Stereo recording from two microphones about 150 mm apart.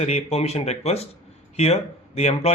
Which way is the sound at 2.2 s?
45° left (ahead or behind).